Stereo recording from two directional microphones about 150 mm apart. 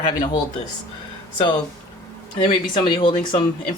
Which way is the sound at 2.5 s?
35° left (ahead or behind).